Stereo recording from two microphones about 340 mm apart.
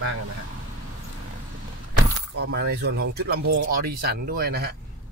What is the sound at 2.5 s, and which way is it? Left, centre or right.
Speech, right.